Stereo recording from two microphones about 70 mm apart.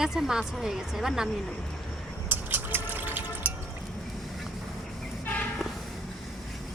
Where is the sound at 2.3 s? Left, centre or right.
Right.